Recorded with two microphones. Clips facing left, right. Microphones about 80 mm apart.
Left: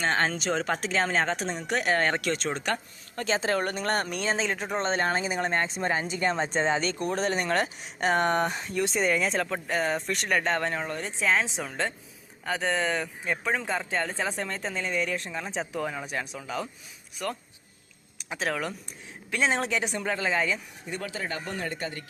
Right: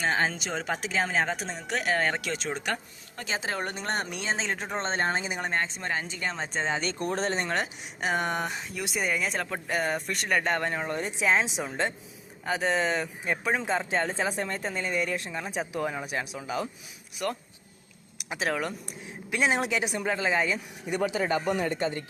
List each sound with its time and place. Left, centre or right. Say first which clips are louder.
0.0 s speech: left 1 dB; centre
5.4 s speech: left 2 dB; centre
5.6 s speech: left 4 dB; centre
7.0 s speech: left 1 dB; right
8.0 s speech: left 4 dB; centre; by 14.3 s right
14.3 s speech: right 1 dB; centre
18.3 s speech: right 1 dB; centre
19.3 s speech: even; centre